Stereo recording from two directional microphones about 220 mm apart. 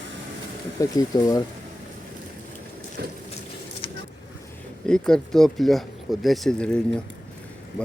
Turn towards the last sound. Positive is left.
turn(degrees=5)  # may be behind; listen again after turning